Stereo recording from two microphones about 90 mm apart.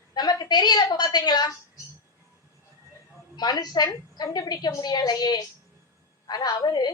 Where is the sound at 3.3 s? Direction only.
50° left (ahead or behind).